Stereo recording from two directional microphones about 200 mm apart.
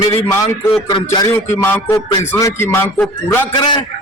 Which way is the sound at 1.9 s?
20° left (ahead or behind).